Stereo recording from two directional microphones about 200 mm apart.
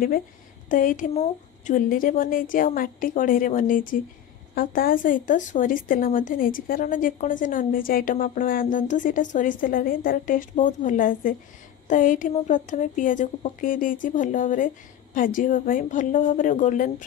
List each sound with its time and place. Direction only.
0.7 s speech: 40° left (ahead or behind)